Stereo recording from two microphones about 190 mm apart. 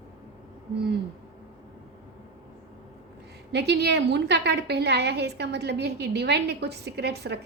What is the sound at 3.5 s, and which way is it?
A woman's voice, 60° right (ahead or behind).